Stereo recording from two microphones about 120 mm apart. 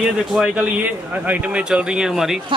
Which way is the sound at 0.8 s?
15° right (ahead or behind).